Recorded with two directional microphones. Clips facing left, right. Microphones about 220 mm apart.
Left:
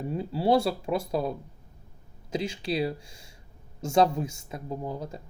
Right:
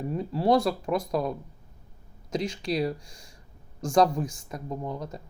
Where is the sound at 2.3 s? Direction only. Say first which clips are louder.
Right 1 dB; 30° left (ahead or behind).